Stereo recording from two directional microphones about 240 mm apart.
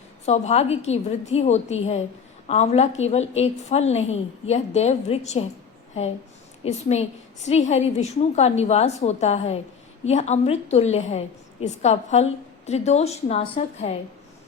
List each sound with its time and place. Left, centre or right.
0.3 s a woman's voice: left
6.7 s a woman's voice: left